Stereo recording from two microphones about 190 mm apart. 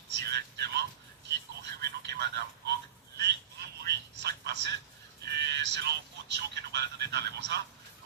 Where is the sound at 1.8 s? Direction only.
60° right (ahead or behind).